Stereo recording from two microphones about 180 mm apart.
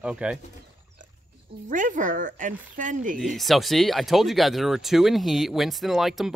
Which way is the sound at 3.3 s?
Centre (ahead or behind).